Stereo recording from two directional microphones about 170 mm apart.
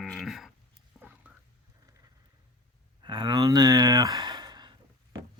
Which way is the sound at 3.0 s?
25° right (ahead or behind).